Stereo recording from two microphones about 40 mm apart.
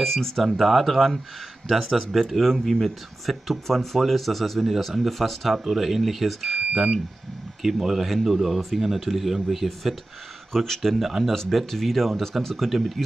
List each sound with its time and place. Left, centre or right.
0.0 s speech: centre
6.7 s speech: centre
7.8 s speech: centre
10.6 s speech: centre